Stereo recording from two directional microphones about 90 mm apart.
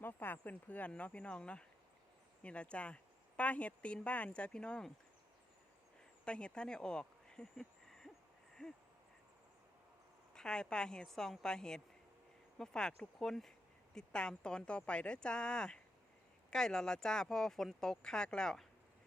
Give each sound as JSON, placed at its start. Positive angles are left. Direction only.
{"t": 0.0, "sound": "speech", "side_deg": 20}
{"t": 6.2, "sound": "speech", "side_deg": 10}
{"t": 10.3, "sound": "speech", "side_deg": 10}